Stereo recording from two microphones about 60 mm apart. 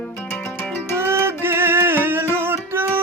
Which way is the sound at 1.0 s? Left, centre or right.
Right.